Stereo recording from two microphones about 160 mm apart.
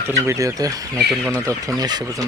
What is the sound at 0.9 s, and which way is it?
Speech, 5° left (ahead or behind).